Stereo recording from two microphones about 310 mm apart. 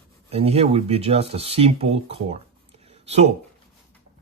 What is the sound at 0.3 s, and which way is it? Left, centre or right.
Speech, centre.